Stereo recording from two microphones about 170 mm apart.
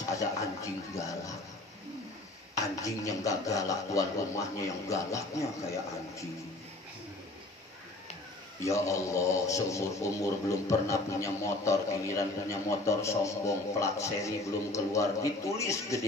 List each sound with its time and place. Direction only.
0.1 s speech: 20° left (ahead or behind)
2.5 s speech: 20° left (ahead or behind)
8.6 s a man's voice: 15° left (ahead or behind)